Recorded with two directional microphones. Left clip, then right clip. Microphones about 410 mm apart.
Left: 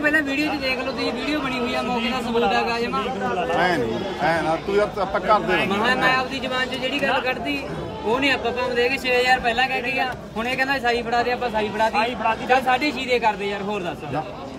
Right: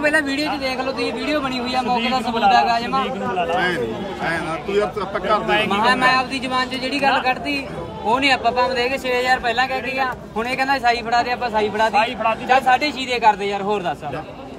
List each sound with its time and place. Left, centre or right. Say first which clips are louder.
0.0 s speech: right 2 dB; centre
3.5 s speech: even; centre
5.5 s speech: right 3 dB; centre
11.9 s speech: right 3 dB; centre
12.4 s speech: right 4 dB; centre